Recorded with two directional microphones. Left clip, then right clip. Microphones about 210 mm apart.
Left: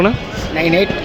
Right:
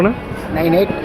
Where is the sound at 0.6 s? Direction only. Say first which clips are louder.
Even; 5° left (ahead or behind).